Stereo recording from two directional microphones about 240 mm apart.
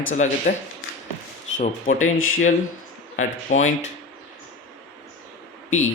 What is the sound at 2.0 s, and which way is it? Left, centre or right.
Speech, left.